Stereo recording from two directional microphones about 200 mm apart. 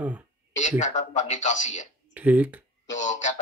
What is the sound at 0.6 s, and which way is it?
A man's voice, 35° left (ahead or behind).